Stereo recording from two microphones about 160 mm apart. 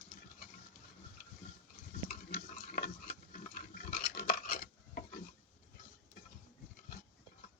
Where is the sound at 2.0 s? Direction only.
70° left (ahead or behind).